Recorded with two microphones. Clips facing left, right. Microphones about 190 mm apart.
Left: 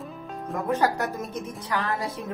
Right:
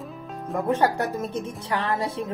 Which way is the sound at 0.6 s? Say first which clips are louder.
Right 2 dB; 30° right (ahead or behind).